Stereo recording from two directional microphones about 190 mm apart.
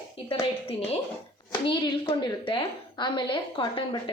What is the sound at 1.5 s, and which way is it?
A woman's voice, 25° left (ahead or behind).